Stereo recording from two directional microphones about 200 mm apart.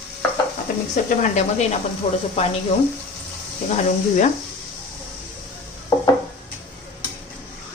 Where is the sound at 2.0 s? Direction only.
30° left (ahead or behind).